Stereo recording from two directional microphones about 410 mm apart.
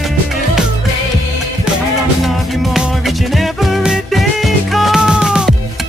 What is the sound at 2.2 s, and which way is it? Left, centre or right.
Music, centre.